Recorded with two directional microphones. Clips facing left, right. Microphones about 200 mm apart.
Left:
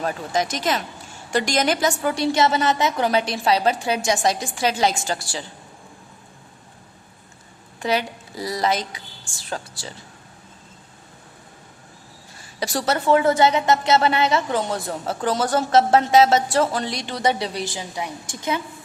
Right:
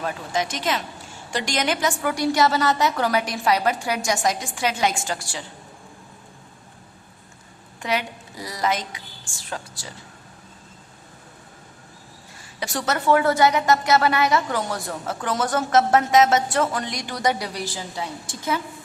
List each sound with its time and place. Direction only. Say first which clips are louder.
0.0 s a woman's voice: left 2 dB; 40° left (ahead or behind)
7.8 s a woman's voice: left 3 dB; 35° left (ahead or behind)
12.5 s a woman's voice: left 3 dB; 35° left (ahead or behind); by 18.6 s 20° left (ahead or behind)